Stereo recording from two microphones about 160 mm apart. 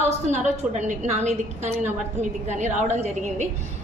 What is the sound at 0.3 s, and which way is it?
A woman's voice, 50° right (ahead or behind).